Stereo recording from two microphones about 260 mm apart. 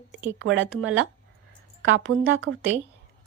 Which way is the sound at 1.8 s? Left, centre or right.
Right.